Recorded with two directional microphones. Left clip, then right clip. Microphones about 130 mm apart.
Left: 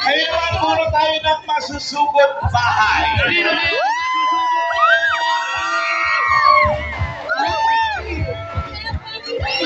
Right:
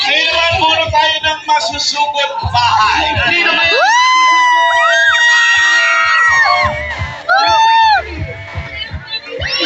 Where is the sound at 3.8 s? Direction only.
30° right (ahead or behind).